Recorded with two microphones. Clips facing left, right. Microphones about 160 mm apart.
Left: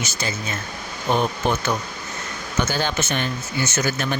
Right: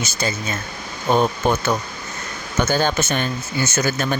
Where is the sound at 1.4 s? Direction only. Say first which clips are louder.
Right 1 dB; 45° right (ahead or behind).